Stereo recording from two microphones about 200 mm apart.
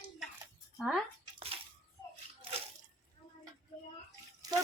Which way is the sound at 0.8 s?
Centre (ahead or behind).